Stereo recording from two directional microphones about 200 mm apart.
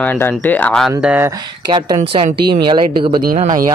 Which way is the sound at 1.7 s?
20° right (ahead or behind).